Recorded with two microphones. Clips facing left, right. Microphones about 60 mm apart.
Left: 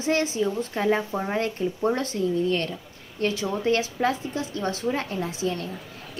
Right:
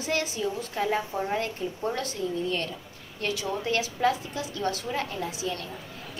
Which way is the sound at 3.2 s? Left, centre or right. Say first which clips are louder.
Left 4 dB; left.